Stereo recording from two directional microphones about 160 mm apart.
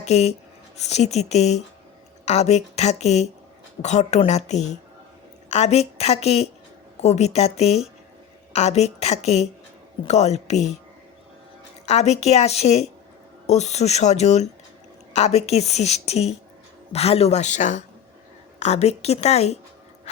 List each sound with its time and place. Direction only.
0.0 s a woman's voice: 40° left (ahead or behind)
11.9 s a woman's voice: 45° left (ahead or behind)